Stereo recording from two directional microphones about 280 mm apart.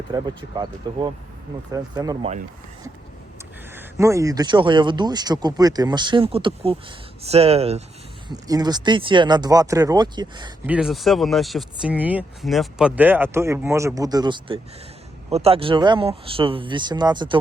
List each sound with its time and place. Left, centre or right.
0.1 s speech: centre
3.8 s speech: centre
10.8 s speech: centre